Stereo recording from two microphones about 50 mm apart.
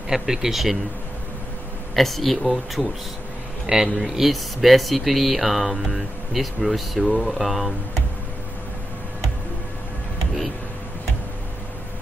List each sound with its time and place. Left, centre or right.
0.1 s speech: centre
2.0 s speech: centre